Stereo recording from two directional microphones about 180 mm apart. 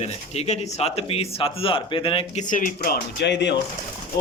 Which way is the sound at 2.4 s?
50° left (ahead or behind).